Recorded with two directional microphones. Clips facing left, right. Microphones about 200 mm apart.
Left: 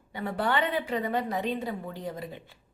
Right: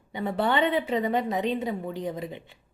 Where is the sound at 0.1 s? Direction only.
20° right (ahead or behind).